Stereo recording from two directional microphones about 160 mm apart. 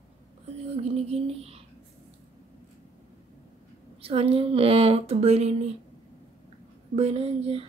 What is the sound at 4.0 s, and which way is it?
A woman's voice, 35° right (ahead or behind).